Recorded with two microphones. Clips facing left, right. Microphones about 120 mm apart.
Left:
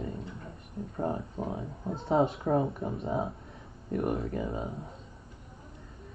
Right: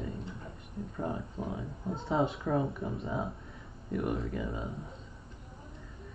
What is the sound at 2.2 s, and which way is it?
Speech, 50° left (ahead or behind).